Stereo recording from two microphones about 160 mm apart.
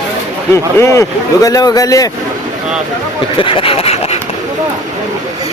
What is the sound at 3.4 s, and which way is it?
Speech, 35° left (ahead or behind).